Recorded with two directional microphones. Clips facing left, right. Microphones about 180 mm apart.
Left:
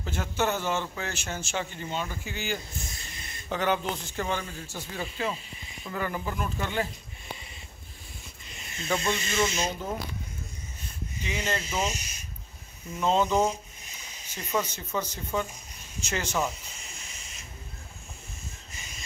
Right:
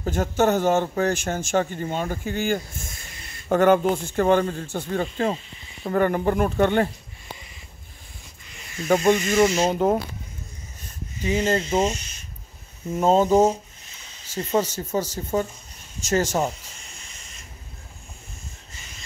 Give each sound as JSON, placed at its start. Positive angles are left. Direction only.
{"t": 0.0, "sound": "a man's voice", "side_deg": -45}
{"t": 5.9, "sound": "speech", "side_deg": -55}
{"t": 8.5, "sound": "snake", "side_deg": 25}
{"t": 8.8, "sound": "a man's voice", "side_deg": -45}
{"t": 9.7, "sound": "speech", "side_deg": -60}
{"t": 10.8, "sound": "a sound", "side_deg": -45}
{"t": 11.7, "sound": "speech", "side_deg": -30}
{"t": 12.9, "sound": "a man's voice", "side_deg": -45}
{"t": 14.6, "sound": "a man's voice", "side_deg": -40}